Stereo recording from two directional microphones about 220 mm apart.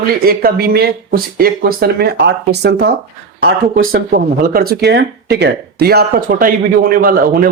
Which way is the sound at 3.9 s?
45° right (ahead or behind).